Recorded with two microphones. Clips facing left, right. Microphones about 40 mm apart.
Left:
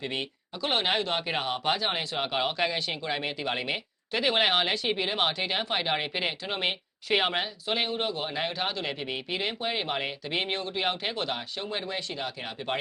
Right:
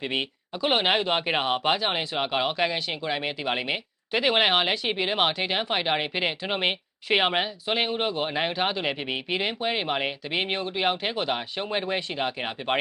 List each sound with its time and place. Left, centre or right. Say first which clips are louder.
0.0 s speech: right 4 dB; centre